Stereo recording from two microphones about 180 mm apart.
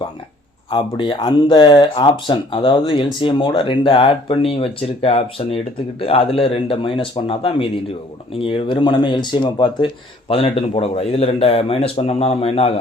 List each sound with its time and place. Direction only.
0.7 s speech: 25° left (ahead or behind)